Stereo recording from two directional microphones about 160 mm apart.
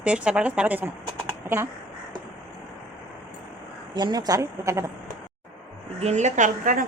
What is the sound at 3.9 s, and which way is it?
Speech, 25° right (ahead or behind).